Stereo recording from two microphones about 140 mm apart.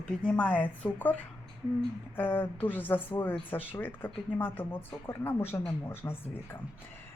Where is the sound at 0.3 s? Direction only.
10° left (ahead or behind).